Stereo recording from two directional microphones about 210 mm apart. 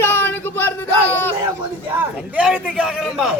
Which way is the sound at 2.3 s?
5° right (ahead or behind).